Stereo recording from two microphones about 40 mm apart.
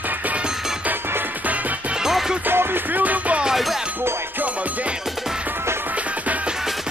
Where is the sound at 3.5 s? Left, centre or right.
Centre.